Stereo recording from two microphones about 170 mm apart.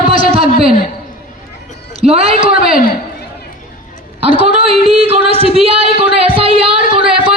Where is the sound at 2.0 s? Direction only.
35° right (ahead or behind).